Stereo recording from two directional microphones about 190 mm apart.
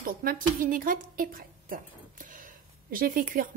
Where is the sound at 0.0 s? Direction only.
50° right (ahead or behind).